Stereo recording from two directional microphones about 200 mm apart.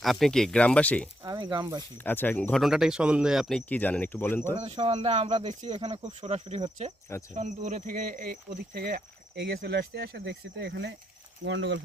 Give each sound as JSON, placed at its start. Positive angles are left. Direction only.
{"t": 0.0, "sound": "speech", "side_deg": 0}
{"t": 1.2, "sound": "speech", "side_deg": -20}
{"t": 2.0, "sound": "speech", "side_deg": 10}
{"t": 4.6, "sound": "speech", "side_deg": -30}